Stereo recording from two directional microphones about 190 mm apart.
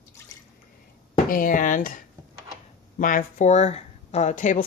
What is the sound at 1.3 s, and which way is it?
Speech, 45° left (ahead or behind).